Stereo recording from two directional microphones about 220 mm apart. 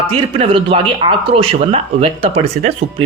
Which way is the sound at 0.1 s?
25° right (ahead or behind).